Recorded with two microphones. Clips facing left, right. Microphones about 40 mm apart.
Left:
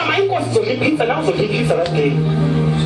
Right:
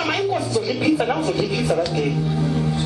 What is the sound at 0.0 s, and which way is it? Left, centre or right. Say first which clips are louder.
A woman's voice: left 5 dB; left.